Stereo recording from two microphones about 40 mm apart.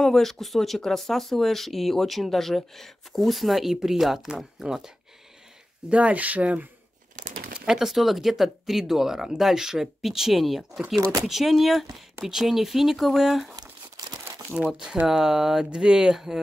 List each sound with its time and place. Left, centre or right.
0.0 s speech: centre
5.9 s speech: right
7.5 s speech: centre
15.0 s speech: centre